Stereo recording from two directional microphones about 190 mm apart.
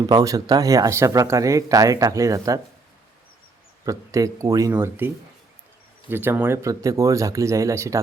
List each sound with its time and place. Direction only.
0.0 s speech: 20° right (ahead or behind)
3.8 s speech: 15° right (ahead or behind)